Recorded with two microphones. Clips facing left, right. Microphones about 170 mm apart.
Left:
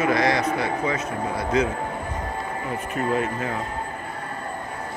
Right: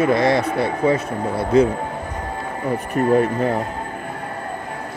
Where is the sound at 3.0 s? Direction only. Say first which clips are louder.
Right 7 dB; 40° right (ahead or behind).